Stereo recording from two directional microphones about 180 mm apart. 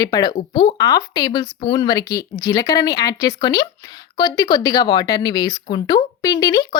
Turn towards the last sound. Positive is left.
turn(degrees=20)  # may be behind; listen again after turning